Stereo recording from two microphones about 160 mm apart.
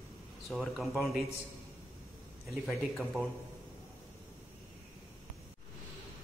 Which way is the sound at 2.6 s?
Centre (ahead or behind).